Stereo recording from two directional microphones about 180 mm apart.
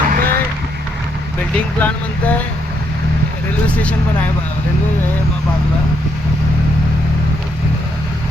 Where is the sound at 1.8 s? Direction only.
10° left (ahead or behind).